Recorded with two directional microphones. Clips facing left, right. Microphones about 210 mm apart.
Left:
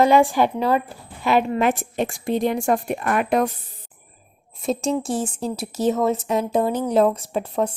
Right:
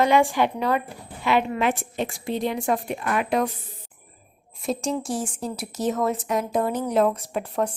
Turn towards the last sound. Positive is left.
turn(degrees=25)  # may be behind; listen again after turning